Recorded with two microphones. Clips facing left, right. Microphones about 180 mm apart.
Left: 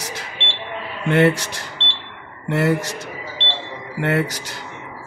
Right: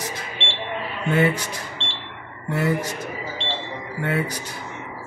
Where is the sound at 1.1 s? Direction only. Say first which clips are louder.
Left 5 dB; 75° left (ahead or behind).